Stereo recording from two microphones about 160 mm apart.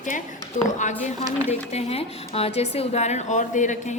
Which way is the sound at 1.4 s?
40° left (ahead or behind).